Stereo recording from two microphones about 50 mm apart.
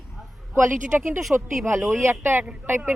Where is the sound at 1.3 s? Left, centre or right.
Right.